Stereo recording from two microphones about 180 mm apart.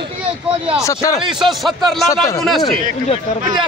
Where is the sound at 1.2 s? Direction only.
Centre (ahead or behind).